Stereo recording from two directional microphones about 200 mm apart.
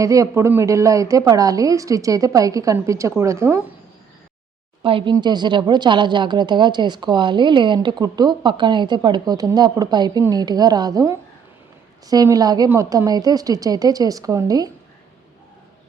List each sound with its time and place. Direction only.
0.0 s a woman's voice: 15° right (ahead or behind)
4.8 s a woman's voice: 25° right (ahead or behind)